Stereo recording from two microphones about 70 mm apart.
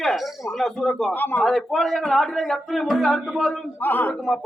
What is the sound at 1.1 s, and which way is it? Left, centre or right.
Speech, left.